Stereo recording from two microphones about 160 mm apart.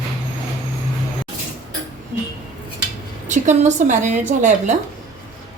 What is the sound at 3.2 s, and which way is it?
A woman's voice, 50° right (ahead or behind).